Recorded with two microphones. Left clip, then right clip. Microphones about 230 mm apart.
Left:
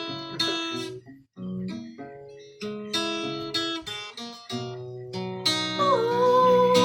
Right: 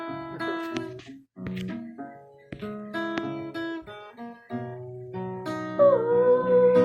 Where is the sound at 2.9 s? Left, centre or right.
Left.